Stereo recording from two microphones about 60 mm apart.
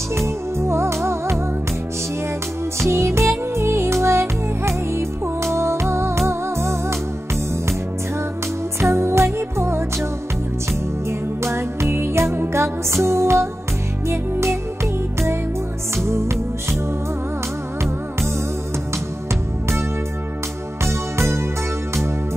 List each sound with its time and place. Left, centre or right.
0.6 s music: right
2.8 s music: right
8.8 s music: right
11.1 s music: right
16.0 s music: right
20.8 s music: right